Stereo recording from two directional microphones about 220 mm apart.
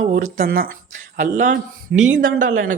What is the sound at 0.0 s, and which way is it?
Speech, 30° right (ahead or behind).